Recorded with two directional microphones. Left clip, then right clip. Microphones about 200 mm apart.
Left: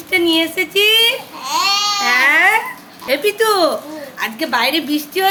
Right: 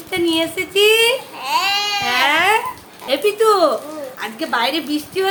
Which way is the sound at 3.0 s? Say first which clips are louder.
Even; 5° left (ahead or behind).